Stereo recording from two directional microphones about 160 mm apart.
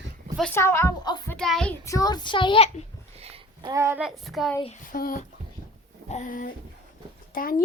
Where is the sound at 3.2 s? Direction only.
35° right (ahead or behind).